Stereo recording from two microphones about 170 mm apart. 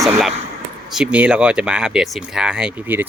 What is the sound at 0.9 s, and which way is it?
Speech, 5° right (ahead or behind).